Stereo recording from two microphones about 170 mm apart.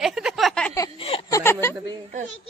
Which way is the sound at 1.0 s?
35° left (ahead or behind).